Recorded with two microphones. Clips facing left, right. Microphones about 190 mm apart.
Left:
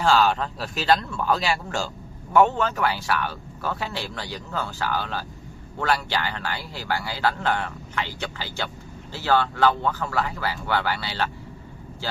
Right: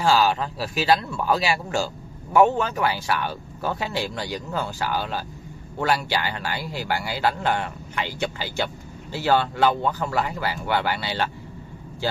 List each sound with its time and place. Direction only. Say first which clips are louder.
0.0 s speech: even; 10° right (ahead or behind)